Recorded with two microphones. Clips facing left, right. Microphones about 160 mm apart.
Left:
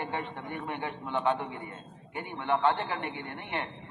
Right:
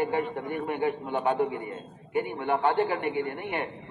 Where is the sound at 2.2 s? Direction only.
50° right (ahead or behind).